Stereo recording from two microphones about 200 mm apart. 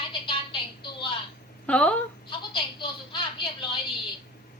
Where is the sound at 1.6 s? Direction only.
5° left (ahead or behind).